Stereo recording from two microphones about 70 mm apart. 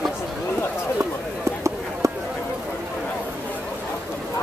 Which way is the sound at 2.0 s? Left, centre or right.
Right.